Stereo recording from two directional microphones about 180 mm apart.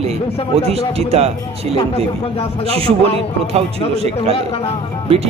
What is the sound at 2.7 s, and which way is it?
Speech, 30° right (ahead or behind).